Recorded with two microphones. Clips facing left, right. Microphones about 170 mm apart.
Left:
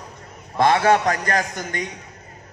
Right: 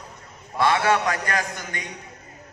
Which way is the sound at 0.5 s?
45° left (ahead or behind).